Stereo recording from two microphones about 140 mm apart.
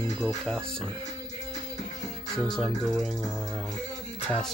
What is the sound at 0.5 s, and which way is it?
Music, 5° left (ahead or behind).